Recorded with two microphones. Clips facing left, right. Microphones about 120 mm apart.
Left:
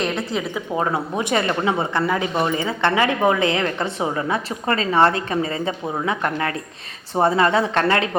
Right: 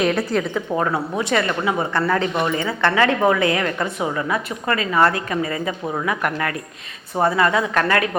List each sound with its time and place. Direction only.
0.0 s a woman's voice: centre (ahead or behind)
0.5 s a woman's voice: 20° left (ahead or behind)
2.3 s a woman's voice: 30° left (ahead or behind)